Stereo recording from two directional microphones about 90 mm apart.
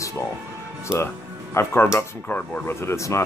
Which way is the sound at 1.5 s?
25° left (ahead or behind).